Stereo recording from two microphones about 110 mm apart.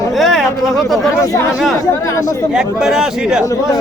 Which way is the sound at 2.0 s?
30° left (ahead or behind).